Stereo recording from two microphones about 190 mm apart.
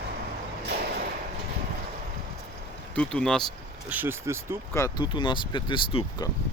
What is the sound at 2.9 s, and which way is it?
Speech, 5° left (ahead or behind).